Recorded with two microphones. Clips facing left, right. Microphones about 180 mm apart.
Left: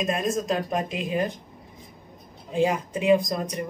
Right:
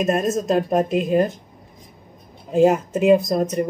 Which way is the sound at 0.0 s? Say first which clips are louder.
Right 5 dB; 45° right (ahead or behind).